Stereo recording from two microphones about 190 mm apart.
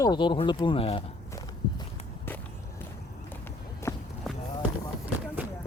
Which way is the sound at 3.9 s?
15° left (ahead or behind).